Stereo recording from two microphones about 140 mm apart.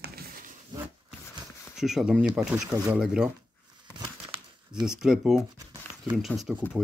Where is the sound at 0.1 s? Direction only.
90° right.